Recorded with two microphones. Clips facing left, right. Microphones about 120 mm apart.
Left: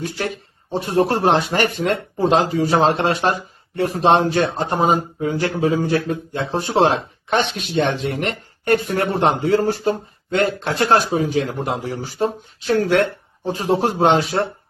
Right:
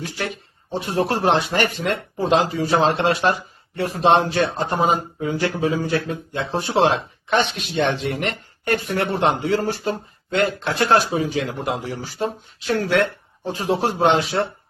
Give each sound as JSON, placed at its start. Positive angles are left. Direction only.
{"t": 0.7, "sound": "a man's voice", "side_deg": 50}